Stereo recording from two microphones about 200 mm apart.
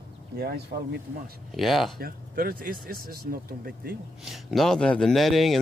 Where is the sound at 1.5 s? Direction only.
Centre (ahead or behind).